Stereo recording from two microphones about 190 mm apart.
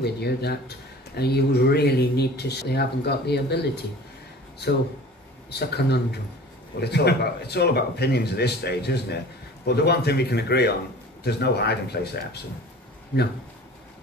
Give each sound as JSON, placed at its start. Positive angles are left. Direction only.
{"t": 0.0, "sound": "speech", "side_deg": 60}
{"t": 5.6, "sound": "speech", "side_deg": 60}